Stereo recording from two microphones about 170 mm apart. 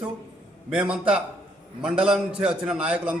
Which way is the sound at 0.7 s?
5° right (ahead or behind).